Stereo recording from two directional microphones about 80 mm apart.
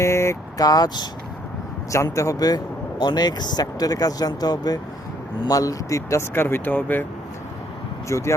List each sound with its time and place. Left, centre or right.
0.0 s vehicle: left
0.5 s speech: left
2.1 s speech: left
3.0 s speech: left
8.0 s speech: left